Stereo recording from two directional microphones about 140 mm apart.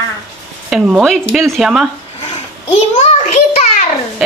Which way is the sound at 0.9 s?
5° right (ahead or behind).